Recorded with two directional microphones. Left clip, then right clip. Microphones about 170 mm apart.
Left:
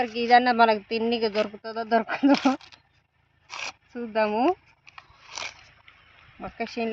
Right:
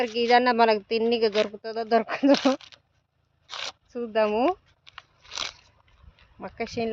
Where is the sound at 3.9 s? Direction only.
30° right (ahead or behind).